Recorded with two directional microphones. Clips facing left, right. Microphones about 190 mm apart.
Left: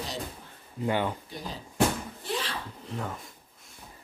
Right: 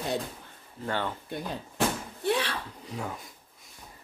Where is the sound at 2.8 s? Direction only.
Centre (ahead or behind).